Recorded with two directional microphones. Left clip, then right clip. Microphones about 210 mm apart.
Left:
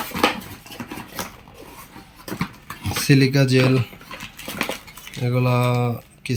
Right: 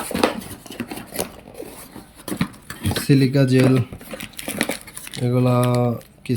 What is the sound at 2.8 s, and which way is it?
Speech, 15° right (ahead or behind).